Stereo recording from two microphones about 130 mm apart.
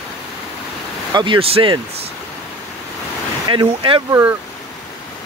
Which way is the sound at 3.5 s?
40° right (ahead or behind).